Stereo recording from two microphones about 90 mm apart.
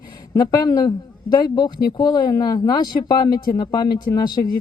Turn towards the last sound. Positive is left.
turn(degrees=45)  # may be behind; listen again after turning